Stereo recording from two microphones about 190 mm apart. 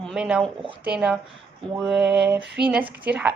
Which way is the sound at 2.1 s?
65° right (ahead or behind).